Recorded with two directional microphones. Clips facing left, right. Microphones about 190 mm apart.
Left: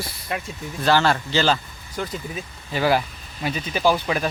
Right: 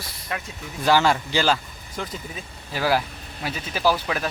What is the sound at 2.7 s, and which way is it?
Speech, centre (ahead or behind).